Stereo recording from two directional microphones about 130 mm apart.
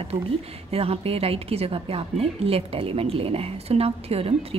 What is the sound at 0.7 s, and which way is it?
A woman's voice, 50° right (ahead or behind).